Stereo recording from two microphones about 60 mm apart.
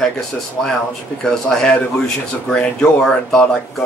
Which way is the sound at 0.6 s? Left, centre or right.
Centre.